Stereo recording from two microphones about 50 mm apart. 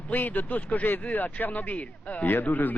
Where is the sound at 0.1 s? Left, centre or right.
Left.